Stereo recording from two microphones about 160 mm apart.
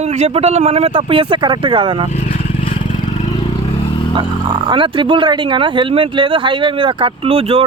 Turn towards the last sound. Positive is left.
turn(degrees=-35)  # may be behind; listen again after turning